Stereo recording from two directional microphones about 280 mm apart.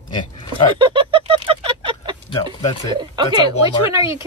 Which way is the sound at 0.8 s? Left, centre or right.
Centre.